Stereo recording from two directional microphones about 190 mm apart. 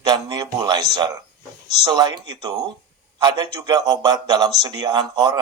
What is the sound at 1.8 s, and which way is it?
Speech, 20° right (ahead or behind).